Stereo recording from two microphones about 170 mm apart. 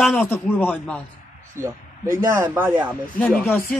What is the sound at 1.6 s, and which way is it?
Speech, 15° right (ahead or behind).